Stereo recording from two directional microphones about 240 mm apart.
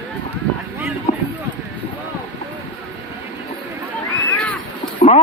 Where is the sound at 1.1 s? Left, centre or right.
Left.